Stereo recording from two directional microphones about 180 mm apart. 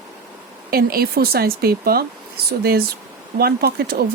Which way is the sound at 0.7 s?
55° right (ahead or behind).